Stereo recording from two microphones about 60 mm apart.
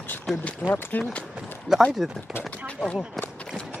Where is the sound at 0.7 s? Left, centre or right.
Left.